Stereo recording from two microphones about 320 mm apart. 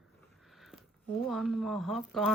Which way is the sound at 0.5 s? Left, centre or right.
Centre.